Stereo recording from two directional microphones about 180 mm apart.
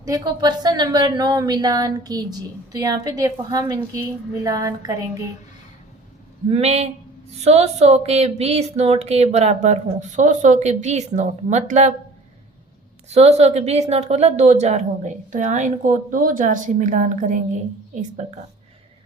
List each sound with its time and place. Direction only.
0.0 s a woman's voice: 20° right (ahead or behind)
6.5 s speech: 35° right (ahead or behind)
13.1 s speech: 35° right (ahead or behind)